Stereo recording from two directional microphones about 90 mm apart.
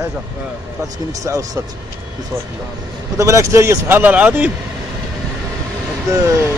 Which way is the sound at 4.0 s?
20° right (ahead or behind).